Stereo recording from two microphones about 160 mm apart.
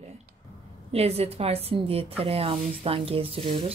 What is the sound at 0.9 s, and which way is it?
Speech, 40° right (ahead or behind).